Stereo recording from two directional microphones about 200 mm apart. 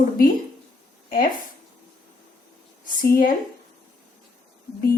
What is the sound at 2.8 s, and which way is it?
Speech, 45° left (ahead or behind).